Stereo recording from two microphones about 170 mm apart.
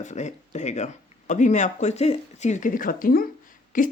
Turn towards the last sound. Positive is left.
turn(degrees=50)  # may be behind; listen again after turning